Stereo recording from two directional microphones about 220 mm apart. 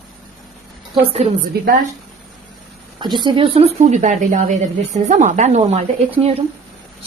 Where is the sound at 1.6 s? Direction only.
45° right (ahead or behind).